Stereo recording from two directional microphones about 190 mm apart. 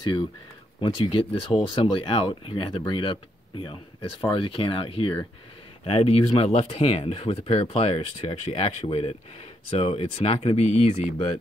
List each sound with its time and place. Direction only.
0.7 s speech: 25° left (ahead or behind)